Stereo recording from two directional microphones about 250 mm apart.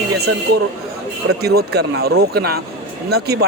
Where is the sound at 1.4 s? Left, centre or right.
Right.